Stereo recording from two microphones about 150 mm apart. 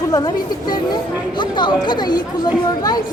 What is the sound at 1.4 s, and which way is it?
Speech, 30° left (ahead or behind).